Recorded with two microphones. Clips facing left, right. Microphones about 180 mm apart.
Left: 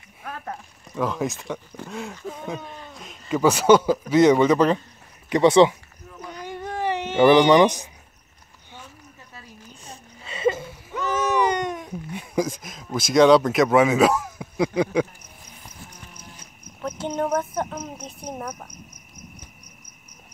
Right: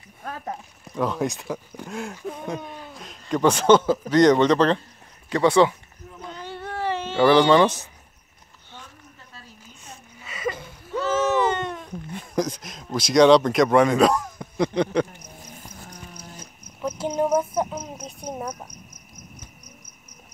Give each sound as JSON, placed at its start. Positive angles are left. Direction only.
{"t": 0.8, "sound": "speech", "side_deg": 0}
{"t": 5.3, "sound": "speech", "side_deg": 20}
{"t": 6.3, "sound": "cat", "side_deg": 15}
{"t": 9.8, "sound": "a sound", "side_deg": 30}
{"t": 10.6, "sound": "a sound", "side_deg": 10}
{"t": 13.1, "sound": "speech", "side_deg": 5}
{"t": 16.8, "sound": "cricket", "side_deg": -5}